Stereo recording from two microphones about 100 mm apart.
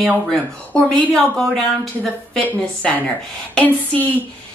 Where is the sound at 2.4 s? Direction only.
15° left (ahead or behind).